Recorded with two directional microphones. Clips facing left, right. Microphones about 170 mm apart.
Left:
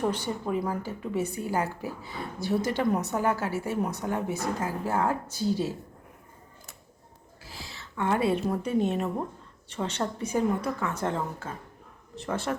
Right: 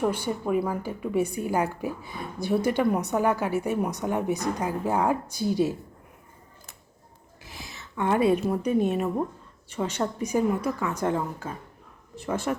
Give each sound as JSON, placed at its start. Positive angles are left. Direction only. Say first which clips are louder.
{"t": 0.1, "sound": "a woman's voice", "louder": "right 3 dB", "side_deg": -10}
{"t": 7.4, "sound": "a sound", "louder": "right 1 dB", "side_deg": -20}
{"t": 8.4, "sound": "a woman's voice", "louder": "right 2 dB", "side_deg": -10}